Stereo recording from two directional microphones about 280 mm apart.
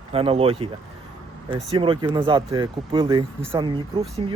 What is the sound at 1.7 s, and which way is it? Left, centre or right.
Speech, centre.